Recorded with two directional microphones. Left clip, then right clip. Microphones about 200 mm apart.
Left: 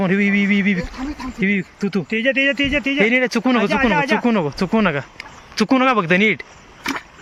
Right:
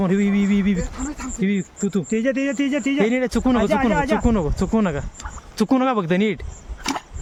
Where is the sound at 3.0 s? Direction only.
10° right (ahead or behind).